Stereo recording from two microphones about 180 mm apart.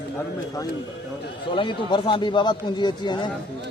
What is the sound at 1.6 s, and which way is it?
Speech, 25° left (ahead or behind).